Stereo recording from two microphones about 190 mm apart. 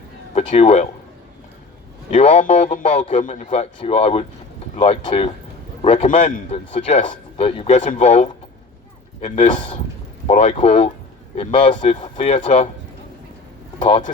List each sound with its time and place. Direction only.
0.3 s speech: 35° left (ahead or behind)
2.0 s a man's voice: 35° left (ahead or behind)
11.7 s a man's voice: 40° left (ahead or behind)